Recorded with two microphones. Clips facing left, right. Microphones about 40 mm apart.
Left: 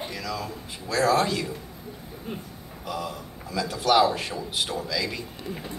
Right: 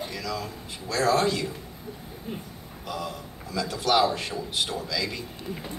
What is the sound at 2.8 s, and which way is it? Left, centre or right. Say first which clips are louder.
A man's voice: left 1 dB; centre.